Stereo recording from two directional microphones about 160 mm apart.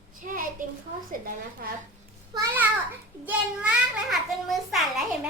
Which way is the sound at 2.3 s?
25° right (ahead or behind).